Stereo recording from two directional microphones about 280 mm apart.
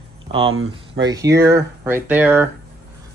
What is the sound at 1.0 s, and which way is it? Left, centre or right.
Speech, centre.